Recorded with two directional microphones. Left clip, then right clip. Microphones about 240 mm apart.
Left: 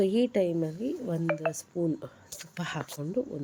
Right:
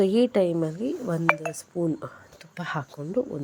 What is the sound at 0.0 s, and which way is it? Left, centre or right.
Speech, centre.